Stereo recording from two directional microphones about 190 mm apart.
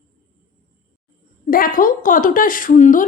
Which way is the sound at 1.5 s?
50° left (ahead or behind).